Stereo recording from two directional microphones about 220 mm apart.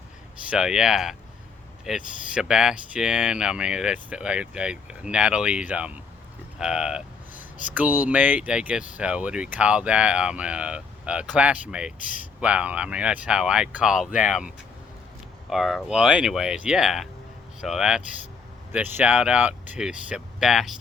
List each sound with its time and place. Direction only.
0.5 s speech: 5° right (ahead or behind)